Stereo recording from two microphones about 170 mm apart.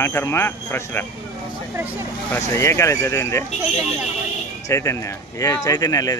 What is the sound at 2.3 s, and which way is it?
Speech, 15° left (ahead or behind).